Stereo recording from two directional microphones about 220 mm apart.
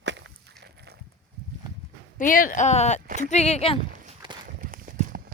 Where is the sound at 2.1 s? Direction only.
40° left (ahead or behind).